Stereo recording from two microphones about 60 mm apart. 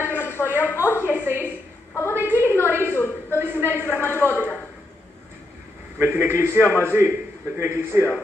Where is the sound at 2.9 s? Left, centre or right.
Left.